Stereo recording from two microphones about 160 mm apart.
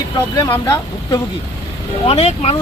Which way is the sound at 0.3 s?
25° left (ahead or behind).